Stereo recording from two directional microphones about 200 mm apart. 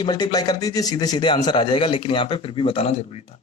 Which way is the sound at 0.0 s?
20° left (ahead or behind).